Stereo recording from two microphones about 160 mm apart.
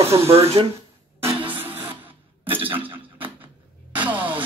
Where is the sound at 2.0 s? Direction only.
10° right (ahead or behind).